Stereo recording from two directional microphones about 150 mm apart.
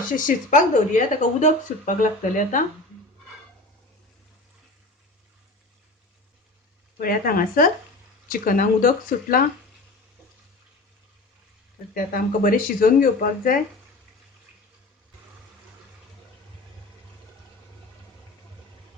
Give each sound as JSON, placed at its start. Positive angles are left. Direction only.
{"t": 0.2, "sound": "speech", "side_deg": 60}
{"t": 7.0, "sound": "speech", "side_deg": 70}
{"t": 11.9, "sound": "speech", "side_deg": 70}